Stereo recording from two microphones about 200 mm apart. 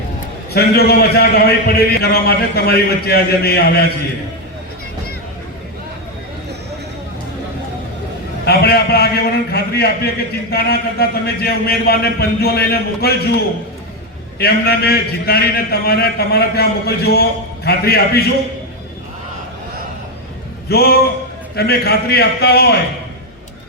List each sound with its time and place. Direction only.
0.5 s a man's voice: 50° left (ahead or behind)
8.4 s a man's voice: 50° left (ahead or behind)
20.7 s a man's voice: 50° left (ahead or behind)